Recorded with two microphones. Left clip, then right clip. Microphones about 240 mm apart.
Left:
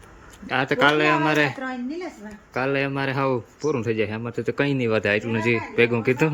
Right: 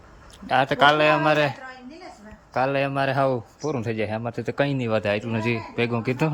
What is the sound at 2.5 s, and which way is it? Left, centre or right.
Speech, centre.